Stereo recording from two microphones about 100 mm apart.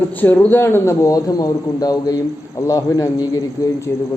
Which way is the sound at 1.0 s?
35° left (ahead or behind).